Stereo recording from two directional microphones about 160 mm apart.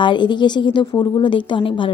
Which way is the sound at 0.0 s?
30° left (ahead or behind).